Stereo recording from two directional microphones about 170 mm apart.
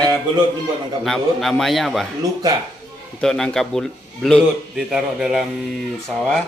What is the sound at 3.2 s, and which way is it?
A man's voice, 5° left (ahead or behind).